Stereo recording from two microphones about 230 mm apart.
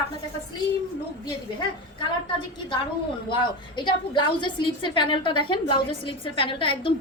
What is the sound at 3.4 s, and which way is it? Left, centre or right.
A woman's voice, centre.